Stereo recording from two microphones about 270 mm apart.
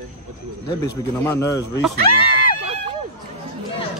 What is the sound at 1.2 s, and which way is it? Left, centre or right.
Speech, centre.